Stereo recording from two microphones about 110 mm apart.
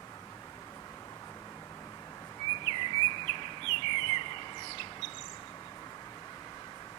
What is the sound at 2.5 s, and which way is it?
Bird vocalization, 45° left (ahead or behind).